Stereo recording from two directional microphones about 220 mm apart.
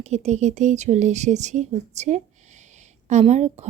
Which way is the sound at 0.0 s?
30° right (ahead or behind).